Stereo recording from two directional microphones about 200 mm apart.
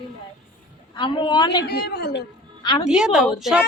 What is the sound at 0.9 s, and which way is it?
Speech, 25° left (ahead or behind).